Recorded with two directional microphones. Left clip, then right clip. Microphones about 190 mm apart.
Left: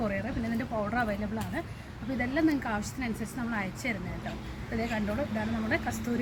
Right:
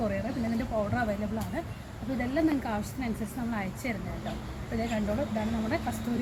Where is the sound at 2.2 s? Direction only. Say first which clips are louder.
Even; 5° left (ahead or behind).